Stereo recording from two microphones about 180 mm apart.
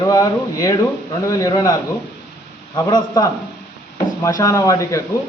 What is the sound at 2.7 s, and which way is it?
Speech, 20° left (ahead or behind).